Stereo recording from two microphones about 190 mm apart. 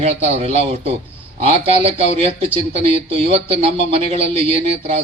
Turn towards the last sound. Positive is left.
turn(degrees=-30)  # may be behind; listen again after turning